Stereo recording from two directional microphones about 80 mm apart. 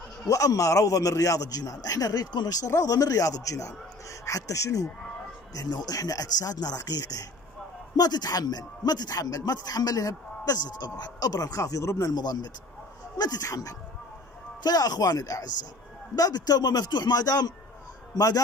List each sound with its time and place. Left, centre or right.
0.3 s a man's voice: left